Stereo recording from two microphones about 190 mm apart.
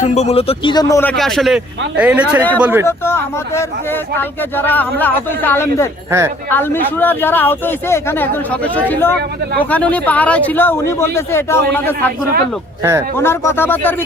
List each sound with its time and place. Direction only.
0.0 s a man's voice: 35° left (ahead or behind); by 1.1 s 15° left (ahead or behind)
1.1 s a man's voice: centre (ahead or behind)
2.8 s speech: 15° left (ahead or behind)
6.1 s speech: 15° right (ahead or behind)
6.5 s speech: 10° left (ahead or behind)
12.8 s speech: 15° right (ahead or behind)
13.1 s speech: 15° left (ahead or behind)